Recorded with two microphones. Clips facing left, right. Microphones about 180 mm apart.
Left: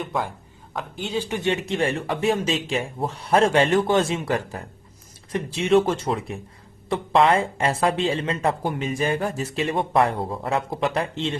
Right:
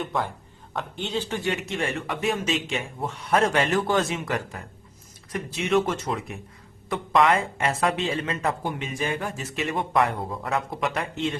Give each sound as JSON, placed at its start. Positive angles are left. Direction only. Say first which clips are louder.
{"t": 0.0, "sound": "a man's voice", "louder": "left 1 dB", "side_deg": 0}
{"t": 1.4, "sound": "speech", "louder": "left 4 dB", "side_deg": 25}